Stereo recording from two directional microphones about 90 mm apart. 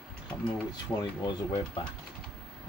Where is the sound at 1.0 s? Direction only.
55° left (ahead or behind).